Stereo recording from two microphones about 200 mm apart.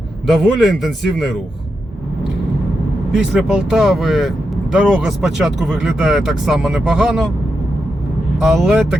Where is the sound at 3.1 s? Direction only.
5° right (ahead or behind).